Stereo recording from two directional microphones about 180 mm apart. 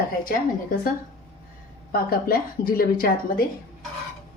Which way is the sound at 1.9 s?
55° left (ahead or behind).